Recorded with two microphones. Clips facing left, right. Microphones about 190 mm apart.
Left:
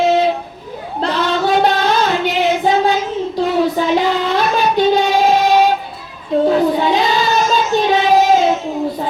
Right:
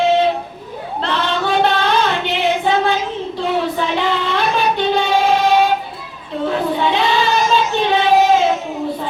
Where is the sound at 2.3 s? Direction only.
40° left (ahead or behind).